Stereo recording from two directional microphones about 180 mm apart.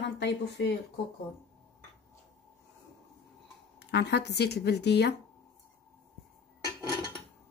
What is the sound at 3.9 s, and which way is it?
Speech, 70° left (ahead or behind).